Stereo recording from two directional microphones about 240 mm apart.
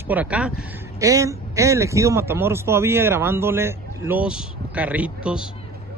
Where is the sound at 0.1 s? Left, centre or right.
Centre.